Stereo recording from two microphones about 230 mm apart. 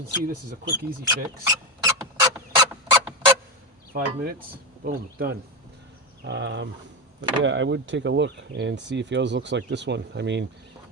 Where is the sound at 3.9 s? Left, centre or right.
Right.